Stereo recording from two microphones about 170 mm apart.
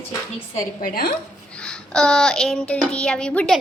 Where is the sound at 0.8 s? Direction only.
55° left (ahead or behind).